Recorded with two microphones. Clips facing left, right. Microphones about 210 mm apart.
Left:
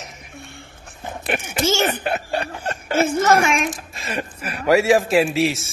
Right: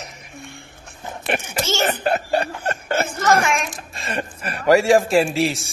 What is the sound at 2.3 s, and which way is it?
Snicker, 50° right (ahead or behind).